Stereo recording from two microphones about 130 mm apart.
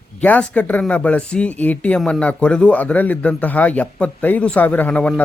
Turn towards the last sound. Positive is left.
turn(degrees=5)  # may be behind; listen again after turning